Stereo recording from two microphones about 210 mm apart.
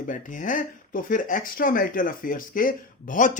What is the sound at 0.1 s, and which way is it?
Speech, 40° left (ahead or behind).